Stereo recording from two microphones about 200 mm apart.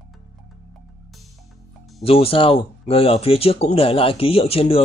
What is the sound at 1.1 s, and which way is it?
Music, centre (ahead or behind).